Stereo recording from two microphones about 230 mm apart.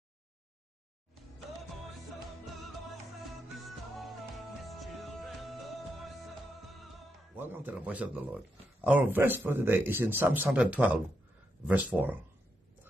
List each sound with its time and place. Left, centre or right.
4.6 s music: centre
7.3 s a man's voice: centre